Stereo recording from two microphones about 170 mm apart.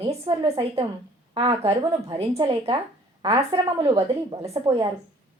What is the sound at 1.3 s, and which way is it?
A woman's voice, 35° right (ahead or behind).